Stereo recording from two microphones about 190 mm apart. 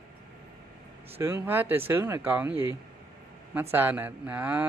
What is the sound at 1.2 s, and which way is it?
Speech, 10° right (ahead or behind).